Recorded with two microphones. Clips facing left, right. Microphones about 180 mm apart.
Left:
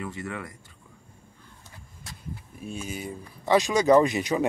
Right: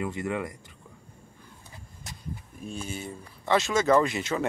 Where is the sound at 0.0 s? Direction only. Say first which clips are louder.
Right 4 dB; 20° right (ahead or behind).